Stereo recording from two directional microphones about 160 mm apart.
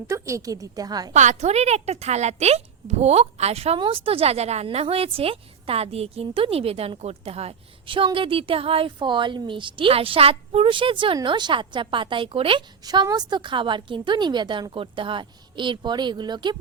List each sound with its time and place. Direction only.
0.1 s a woman's voice: 20° right (ahead or behind)
1.1 s a woman's voice: 50° right (ahead or behind); by 16.6 s 25° right (ahead or behind)